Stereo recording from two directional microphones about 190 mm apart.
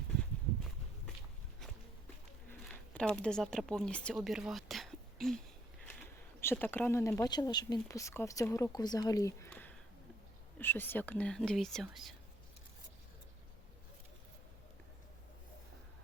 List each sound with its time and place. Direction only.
2.5 s speech: 5° left (ahead or behind)
6.4 s speech: 10° left (ahead or behind)
9.5 s a sound: 10° left (ahead or behind)
10.6 s speech: 10° left (ahead or behind)